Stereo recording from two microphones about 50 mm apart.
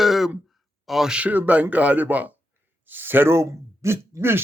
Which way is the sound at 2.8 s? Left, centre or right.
Right.